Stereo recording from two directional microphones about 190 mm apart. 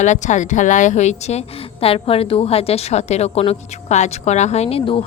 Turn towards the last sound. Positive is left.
turn(degrees=30)  # may be behind; listen again after turning